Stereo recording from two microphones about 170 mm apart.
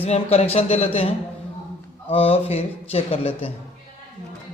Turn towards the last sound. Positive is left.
turn(degrees=35)  # may be behind; listen again after turning